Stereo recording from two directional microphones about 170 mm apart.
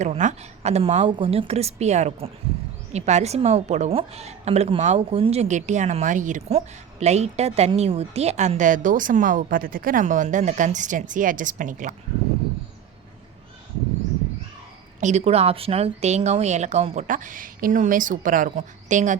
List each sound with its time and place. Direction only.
0.0 s a woman's voice: 45° right (ahead or behind)
15.0 s a woman's voice: 40° right (ahead or behind)